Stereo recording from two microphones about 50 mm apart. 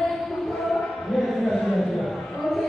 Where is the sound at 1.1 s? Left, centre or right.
Centre.